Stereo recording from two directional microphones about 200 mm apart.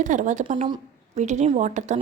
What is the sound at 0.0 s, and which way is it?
A woman's voice, 40° right (ahead or behind).